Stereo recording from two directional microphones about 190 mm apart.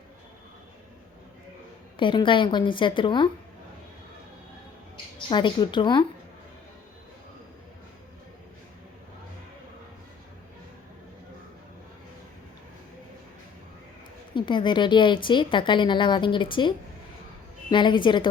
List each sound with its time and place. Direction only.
2.0 s a woman's voice: 25° left (ahead or behind)
5.3 s a woman's voice: 25° left (ahead or behind)
14.3 s a woman's voice: 25° left (ahead or behind)